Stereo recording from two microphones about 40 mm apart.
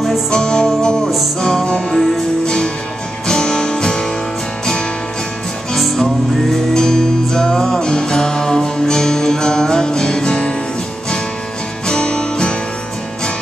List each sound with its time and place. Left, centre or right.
0.3 s music: left
6.7 s music: centre
11.9 s music: left